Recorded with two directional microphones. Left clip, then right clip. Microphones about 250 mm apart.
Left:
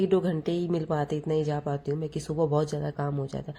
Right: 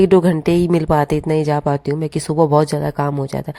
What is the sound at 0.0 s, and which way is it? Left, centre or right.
A woman's voice, right.